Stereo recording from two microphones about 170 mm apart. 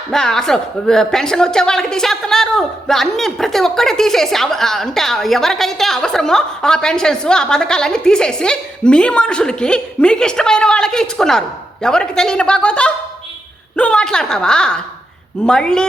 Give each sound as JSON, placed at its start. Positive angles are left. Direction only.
{"t": 0.1, "sound": "a woman's voice", "side_deg": 5}